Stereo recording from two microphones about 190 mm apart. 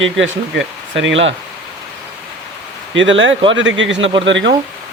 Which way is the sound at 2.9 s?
80° right.